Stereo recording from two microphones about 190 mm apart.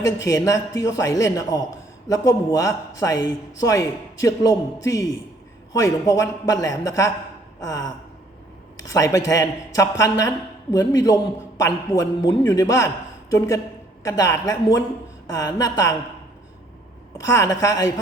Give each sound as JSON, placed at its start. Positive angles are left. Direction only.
{"t": 0.3, "sound": "speech", "side_deg": 20}
{"t": 14.0, "sound": "speech", "side_deg": 15}
{"t": 17.2, "sound": "speech", "side_deg": 15}